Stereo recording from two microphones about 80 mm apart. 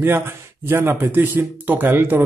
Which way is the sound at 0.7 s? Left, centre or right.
Right.